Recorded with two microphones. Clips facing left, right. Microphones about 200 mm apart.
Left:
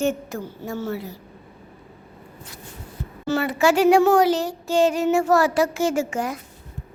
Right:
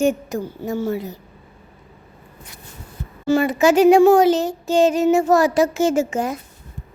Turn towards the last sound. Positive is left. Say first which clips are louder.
# right 4 dB
turn(degrees=-20)  # may be behind; listen again after turning